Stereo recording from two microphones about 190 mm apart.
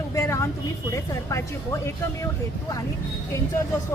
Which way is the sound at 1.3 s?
15° left (ahead or behind).